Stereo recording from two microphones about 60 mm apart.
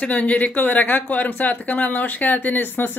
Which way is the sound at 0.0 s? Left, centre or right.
Left.